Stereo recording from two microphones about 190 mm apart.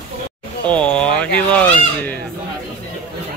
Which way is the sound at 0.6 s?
5° left (ahead or behind).